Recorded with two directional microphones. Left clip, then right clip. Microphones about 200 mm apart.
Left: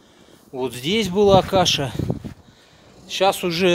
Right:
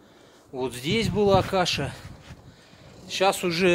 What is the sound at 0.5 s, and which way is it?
Speech, 40° left (ahead or behind).